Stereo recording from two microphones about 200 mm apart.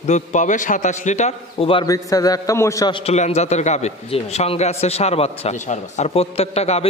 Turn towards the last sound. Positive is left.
turn(degrees=30)  # may be behind; listen again after turning